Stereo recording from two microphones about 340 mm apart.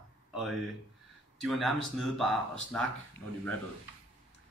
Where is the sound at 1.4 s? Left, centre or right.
Centre.